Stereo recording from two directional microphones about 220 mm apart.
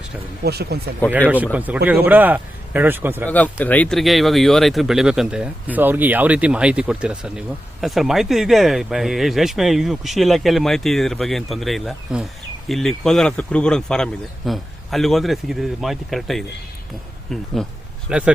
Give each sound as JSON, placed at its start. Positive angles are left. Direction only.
{"t": 0.4, "sound": "speech", "side_deg": -45}
{"t": 1.5, "sound": "speech", "side_deg": -5}
{"t": 3.2, "sound": "speech", "side_deg": 5}
{"t": 17.6, "sound": "speech", "side_deg": 0}